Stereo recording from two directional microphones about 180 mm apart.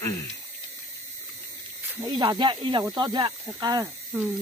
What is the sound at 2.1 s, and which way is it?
Speech, 25° right (ahead or behind).